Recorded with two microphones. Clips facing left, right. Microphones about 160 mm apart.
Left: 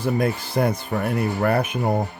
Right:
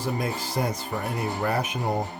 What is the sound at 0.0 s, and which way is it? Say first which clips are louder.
Speech: left 6 dB; 60° left (ahead or behind).